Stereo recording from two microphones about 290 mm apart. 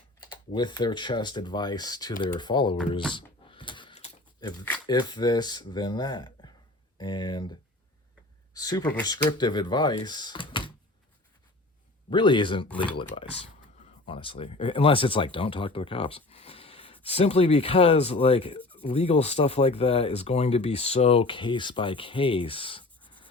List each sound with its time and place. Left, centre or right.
0.2 s speech: centre
3.1 s a sound: centre
7.0 s speech: centre
8.5 s speech: centre
12.1 s speech: centre